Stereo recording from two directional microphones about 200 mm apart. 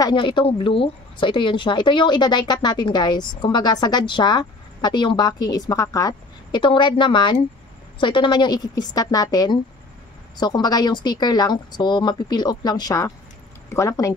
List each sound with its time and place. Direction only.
0.0 s a woman's voice: 25° left (ahead or behind)